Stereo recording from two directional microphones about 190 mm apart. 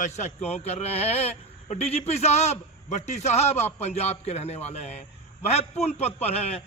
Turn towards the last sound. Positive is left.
turn(degrees=30)  # may be behind; listen again after turning